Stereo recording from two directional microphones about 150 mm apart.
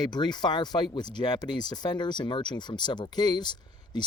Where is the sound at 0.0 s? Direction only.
30° left (ahead or behind).